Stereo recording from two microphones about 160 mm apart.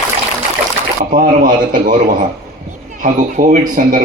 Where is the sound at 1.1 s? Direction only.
60° right (ahead or behind).